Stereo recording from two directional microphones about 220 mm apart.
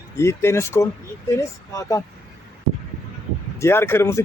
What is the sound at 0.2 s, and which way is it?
Speech, 10° left (ahead or behind).